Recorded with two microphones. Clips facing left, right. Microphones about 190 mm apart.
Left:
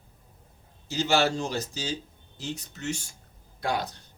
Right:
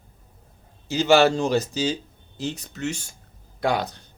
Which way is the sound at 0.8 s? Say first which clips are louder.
Right 7 dB; 75° right (ahead or behind).